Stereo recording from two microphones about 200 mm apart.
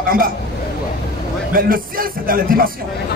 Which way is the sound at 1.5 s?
45° right (ahead or behind).